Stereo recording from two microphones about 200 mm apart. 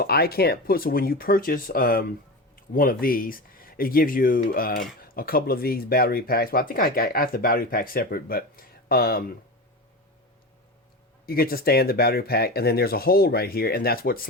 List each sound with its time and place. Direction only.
0.0 s speech: 50° left (ahead or behind)
11.3 s speech: 50° left (ahead or behind)